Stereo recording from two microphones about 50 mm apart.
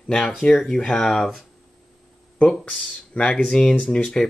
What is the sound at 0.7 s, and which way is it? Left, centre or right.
Speech, centre.